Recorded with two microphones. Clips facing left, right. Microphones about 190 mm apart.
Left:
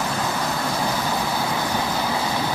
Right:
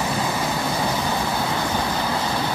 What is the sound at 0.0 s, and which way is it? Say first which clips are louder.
Vehicle: right 1 dB; 5° right (ahead or behind).